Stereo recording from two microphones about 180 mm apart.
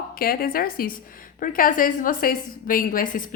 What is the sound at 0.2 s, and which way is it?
A woman's voice, 55° left (ahead or behind).